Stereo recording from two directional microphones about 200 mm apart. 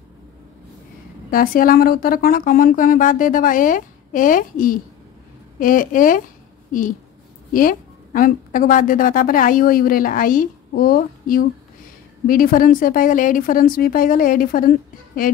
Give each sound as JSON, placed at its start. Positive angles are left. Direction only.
{"t": 1.3, "sound": "a woman's voice", "side_deg": 45}